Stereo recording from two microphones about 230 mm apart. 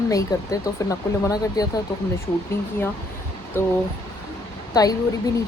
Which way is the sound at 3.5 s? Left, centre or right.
Centre.